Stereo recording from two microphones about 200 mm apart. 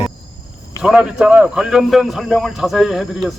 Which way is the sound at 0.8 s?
Centre (ahead or behind).